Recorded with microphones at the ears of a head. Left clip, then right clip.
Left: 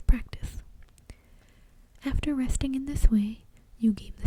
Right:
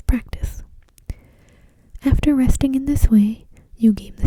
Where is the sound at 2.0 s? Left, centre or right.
Right.